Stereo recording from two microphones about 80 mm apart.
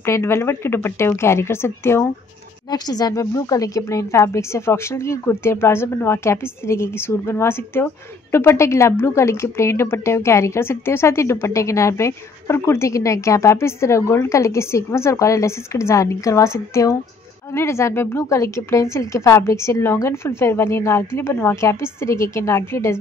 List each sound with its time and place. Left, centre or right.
0.0 s a woman's voice: left
2.7 s a woman's voice: left
17.6 s a woman's voice: left